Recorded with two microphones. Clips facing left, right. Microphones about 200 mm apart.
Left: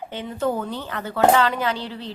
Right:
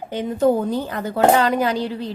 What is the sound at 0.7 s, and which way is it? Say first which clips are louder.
Speech: right 6 dB; 40° right (ahead or behind).